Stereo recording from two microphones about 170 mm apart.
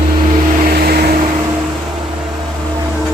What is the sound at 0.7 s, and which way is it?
Vehicle, 65° right (ahead or behind).